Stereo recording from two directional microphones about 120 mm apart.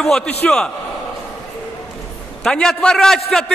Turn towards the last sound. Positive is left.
turn(degrees=5)  # may be behind; listen again after turning